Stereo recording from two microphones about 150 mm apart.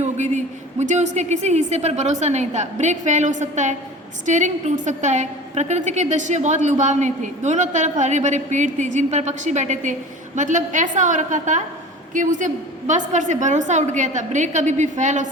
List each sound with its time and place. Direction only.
0.0 s a woman's voice: 50° right (ahead or behind)